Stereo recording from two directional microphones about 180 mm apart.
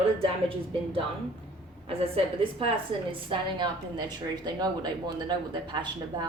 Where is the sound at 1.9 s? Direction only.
30° right (ahead or behind).